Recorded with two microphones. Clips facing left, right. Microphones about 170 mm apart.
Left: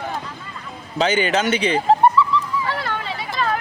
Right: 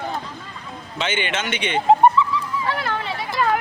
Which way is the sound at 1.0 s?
35° left (ahead or behind).